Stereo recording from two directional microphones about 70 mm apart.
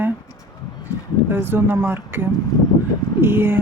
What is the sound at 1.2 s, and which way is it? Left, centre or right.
Speech, right.